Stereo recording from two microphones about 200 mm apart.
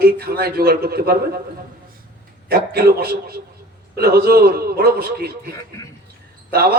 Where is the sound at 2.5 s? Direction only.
50° right (ahead or behind).